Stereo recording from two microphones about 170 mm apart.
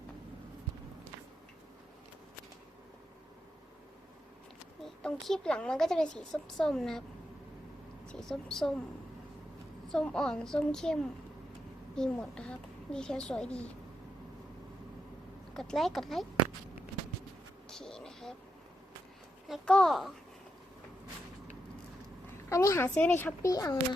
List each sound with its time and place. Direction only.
5.0 s a woman's voice: 5° left (ahead or behind)
8.0 s a woman's voice: 5° left (ahead or behind)
9.9 s a woman's voice: 5° left (ahead or behind)
11.9 s a woman's voice: 5° left (ahead or behind)
15.5 s a woman's voice: centre (ahead or behind)
17.7 s a sound: 5° left (ahead or behind)
19.5 s a woman's voice: 5° left (ahead or behind)
22.4 s speech: 15° left (ahead or behind)